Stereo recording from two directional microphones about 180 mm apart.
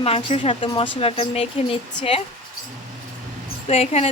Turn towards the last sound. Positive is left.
turn(degrees=35)  # may be behind; listen again after turning